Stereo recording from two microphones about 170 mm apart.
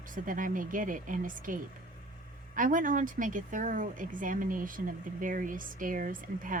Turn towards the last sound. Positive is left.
turn(degrees=-55)  # may be behind; listen again after turning